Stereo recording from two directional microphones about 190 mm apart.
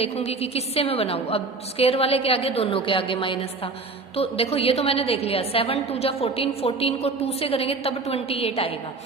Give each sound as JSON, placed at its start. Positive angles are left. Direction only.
{"t": 0.0, "sound": "a woman's voice", "side_deg": 30}